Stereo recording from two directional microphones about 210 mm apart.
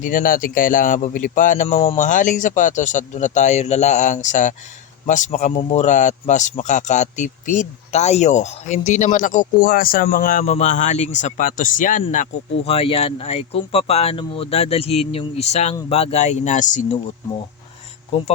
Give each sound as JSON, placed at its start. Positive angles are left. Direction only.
{"t": 0.0, "sound": "speech", "side_deg": 40}